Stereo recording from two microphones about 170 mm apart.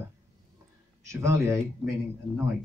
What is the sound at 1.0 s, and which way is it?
Speech, 15° right (ahead or behind).